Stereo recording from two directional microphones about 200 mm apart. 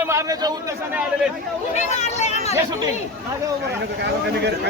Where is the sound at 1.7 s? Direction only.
35° left (ahead or behind).